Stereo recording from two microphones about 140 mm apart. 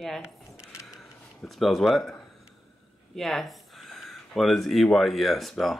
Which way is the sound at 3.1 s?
Centre (ahead or behind).